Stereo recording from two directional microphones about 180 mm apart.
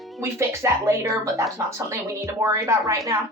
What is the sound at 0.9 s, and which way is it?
Speech, 15° right (ahead or behind).